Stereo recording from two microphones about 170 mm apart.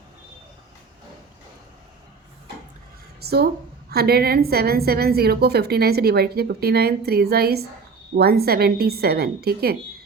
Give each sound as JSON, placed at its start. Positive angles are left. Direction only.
{"t": 3.2, "sound": "a woman's voice", "side_deg": -70}